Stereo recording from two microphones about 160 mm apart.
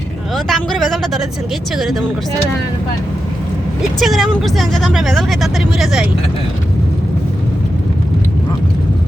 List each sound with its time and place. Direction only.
0.3 s speech: centre (ahead or behind)
4.0 s speech: centre (ahead or behind)